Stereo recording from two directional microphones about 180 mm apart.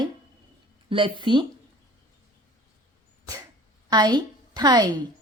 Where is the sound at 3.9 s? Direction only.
20° right (ahead or behind).